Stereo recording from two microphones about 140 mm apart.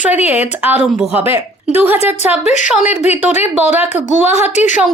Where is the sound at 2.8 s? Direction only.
55° left (ahead or behind).